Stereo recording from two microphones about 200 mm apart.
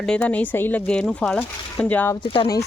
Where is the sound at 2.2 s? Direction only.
25° left (ahead or behind).